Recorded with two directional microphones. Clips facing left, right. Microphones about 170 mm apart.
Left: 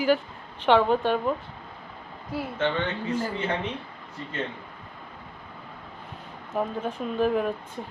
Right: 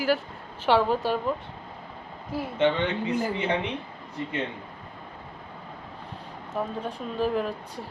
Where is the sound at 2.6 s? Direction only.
15° right (ahead or behind).